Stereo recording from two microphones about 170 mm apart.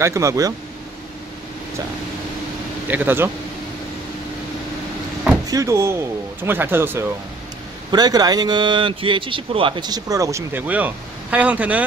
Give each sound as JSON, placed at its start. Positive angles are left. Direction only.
{"t": 0.0, "sound": "speech", "side_deg": -15}
{"t": 2.9, "sound": "speech", "side_deg": -10}
{"t": 5.5, "sound": "speech", "side_deg": -20}
{"t": 7.9, "sound": "speech", "side_deg": -25}